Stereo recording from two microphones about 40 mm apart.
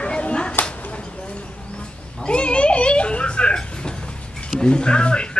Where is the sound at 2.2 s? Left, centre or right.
Left.